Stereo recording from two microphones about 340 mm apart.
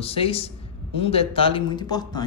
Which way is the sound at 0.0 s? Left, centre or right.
Centre.